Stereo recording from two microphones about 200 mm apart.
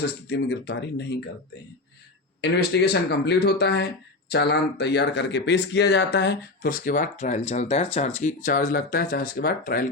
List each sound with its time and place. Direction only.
0.0 s speech: 55° left (ahead or behind)
2.4 s speech: 55° left (ahead or behind)